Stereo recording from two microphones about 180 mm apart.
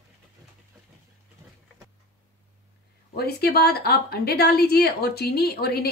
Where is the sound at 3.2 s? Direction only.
65° left (ahead or behind).